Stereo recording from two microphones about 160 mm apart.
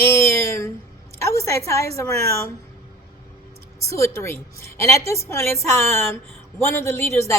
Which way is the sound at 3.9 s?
20° left (ahead or behind).